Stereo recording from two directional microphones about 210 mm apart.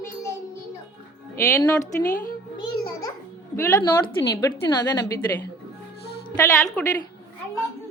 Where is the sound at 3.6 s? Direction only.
15° left (ahead or behind).